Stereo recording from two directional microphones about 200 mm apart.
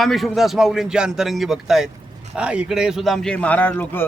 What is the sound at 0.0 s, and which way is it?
A man's voice, centre (ahead or behind).